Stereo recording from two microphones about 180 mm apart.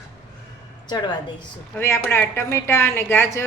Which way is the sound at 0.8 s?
25° left (ahead or behind).